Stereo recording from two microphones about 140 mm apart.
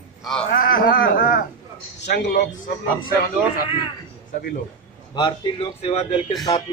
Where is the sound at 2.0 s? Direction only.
60° left (ahead or behind).